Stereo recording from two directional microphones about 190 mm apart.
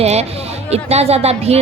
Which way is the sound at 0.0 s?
35° right (ahead or behind).